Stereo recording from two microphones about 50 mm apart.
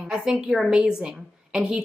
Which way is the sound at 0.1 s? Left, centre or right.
Centre.